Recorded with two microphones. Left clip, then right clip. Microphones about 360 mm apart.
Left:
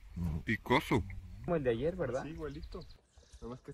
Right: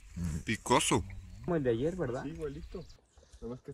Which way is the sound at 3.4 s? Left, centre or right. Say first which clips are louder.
Right 3 dB; centre.